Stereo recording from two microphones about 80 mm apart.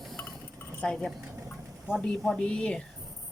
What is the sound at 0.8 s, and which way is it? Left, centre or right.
Speech, centre.